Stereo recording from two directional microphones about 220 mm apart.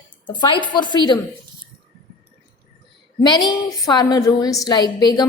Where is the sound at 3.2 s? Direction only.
20° left (ahead or behind).